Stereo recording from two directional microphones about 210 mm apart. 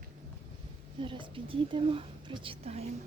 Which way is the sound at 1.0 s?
25° right (ahead or behind).